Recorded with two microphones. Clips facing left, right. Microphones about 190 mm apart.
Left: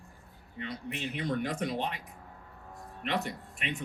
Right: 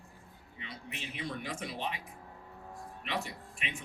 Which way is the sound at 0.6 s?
60° left (ahead or behind).